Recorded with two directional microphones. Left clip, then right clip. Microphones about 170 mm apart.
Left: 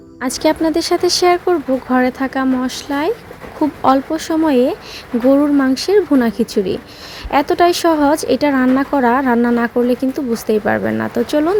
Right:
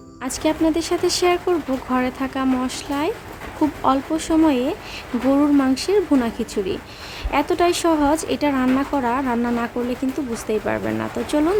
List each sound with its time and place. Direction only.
0.2 s a woman's voice: 30° left (ahead or behind)